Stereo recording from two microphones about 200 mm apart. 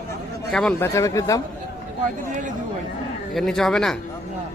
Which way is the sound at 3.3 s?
Centre (ahead or behind).